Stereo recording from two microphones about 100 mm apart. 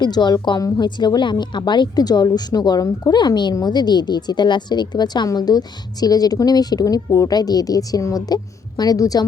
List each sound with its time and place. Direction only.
0.0 s a woman's voice: 45° left (ahead or behind)